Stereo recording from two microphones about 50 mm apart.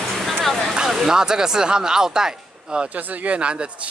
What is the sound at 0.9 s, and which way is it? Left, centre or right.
Speech, centre.